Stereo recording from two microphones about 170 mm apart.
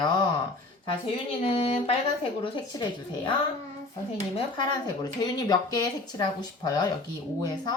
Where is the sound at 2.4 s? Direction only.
30° left (ahead or behind).